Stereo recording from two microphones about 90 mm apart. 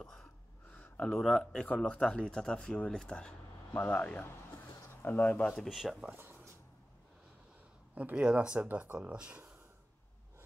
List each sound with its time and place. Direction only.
0.0 s gasp: 5° left (ahead or behind)
0.7 s speech: 15° left (ahead or behind)
5.6 s speech: centre (ahead or behind)
6.0 s a sound: 25° right (ahead or behind)
7.9 s speech: 15° right (ahead or behind)